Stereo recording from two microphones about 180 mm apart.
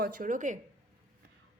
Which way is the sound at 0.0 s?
50° right (ahead or behind).